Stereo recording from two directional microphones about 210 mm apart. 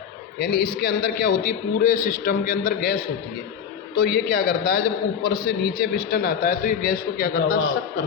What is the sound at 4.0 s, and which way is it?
A man's voice, 45° left (ahead or behind).